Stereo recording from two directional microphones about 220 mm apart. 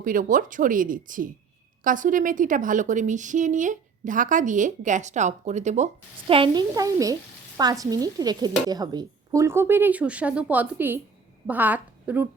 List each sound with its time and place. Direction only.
0.0 s a woman's voice: 40° right (ahead or behind); by 12.3 s 10° right (ahead or behind)